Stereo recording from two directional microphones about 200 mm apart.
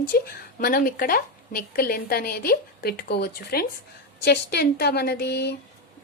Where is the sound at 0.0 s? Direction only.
45° left (ahead or behind).